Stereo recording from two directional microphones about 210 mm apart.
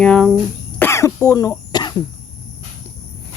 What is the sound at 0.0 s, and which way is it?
Cricket, 5° left (ahead or behind).